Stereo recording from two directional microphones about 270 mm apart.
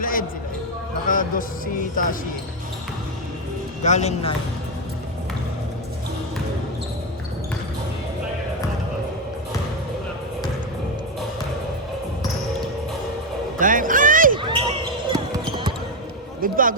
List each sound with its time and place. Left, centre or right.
0.0 s basketball bounce: left
1.0 s speech: left
3.8 s speech: left
13.6 s a sound: right
14.3 s basketball bounce: centre
16.4 s a man's voice: right